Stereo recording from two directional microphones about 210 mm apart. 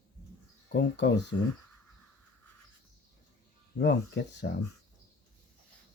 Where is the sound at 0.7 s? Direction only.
55° left (ahead or behind).